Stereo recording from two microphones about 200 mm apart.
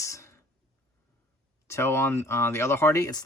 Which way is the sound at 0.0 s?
15° left (ahead or behind).